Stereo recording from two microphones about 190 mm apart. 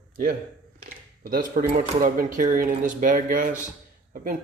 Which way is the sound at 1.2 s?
50° right (ahead or behind).